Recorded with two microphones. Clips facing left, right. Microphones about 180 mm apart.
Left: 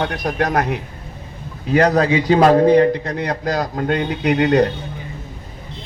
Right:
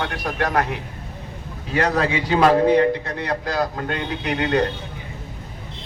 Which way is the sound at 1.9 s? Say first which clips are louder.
Left 6 dB; 40° left (ahead or behind).